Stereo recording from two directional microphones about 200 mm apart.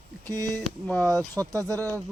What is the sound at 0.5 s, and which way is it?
Speech, 5° left (ahead or behind).